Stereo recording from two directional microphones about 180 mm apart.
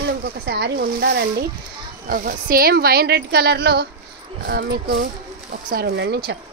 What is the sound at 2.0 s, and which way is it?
Speech, 55° right (ahead or behind).